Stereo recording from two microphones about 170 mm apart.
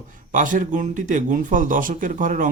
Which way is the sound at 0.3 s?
50° right (ahead or behind).